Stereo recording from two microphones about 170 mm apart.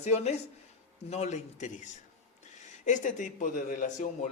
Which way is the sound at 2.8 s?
45° left (ahead or behind).